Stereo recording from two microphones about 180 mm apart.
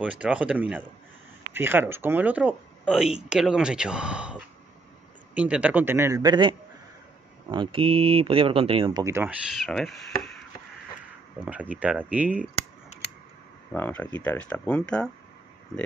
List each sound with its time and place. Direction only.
0.0 s a man's voice: 5° right (ahead or behind); by 6.5 s 25° right (ahead or behind)
7.5 s speech: 30° right (ahead or behind)
9.0 s a man's voice: 10° right (ahead or behind)
9.5 s speech: centre (ahead or behind)
11.7 s a man's voice: 10° right (ahead or behind)
13.7 s speech: 10° left (ahead or behind)